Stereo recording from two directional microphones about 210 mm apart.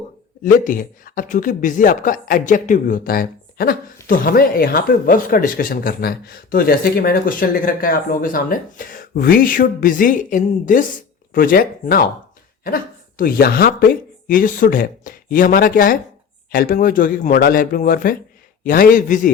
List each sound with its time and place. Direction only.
0.4 s speech: 40° left (ahead or behind)